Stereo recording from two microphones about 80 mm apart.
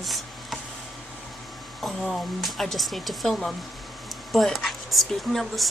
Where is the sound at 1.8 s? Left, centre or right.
Centre.